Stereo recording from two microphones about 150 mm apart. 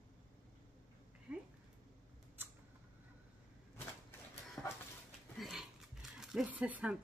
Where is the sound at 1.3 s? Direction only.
5° right (ahead or behind).